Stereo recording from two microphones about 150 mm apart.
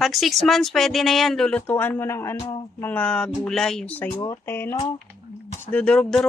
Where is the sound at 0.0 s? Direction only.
Centre (ahead or behind).